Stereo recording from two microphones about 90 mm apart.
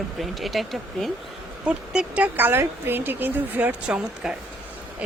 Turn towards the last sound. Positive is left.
turn(degrees=-10)  # may be behind; listen again after turning